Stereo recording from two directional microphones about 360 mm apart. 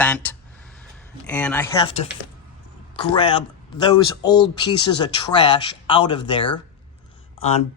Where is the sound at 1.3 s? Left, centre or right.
Centre.